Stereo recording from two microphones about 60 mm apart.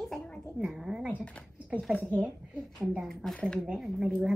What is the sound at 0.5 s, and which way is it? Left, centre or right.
Speech, centre.